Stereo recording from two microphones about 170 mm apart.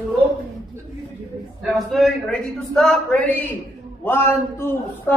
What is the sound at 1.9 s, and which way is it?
A man's voice, 5° left (ahead or behind).